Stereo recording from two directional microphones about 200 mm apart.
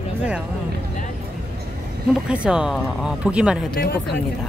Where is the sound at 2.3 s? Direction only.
5° right (ahead or behind).